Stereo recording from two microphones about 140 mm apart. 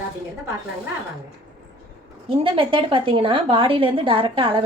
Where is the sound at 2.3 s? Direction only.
40° right (ahead or behind).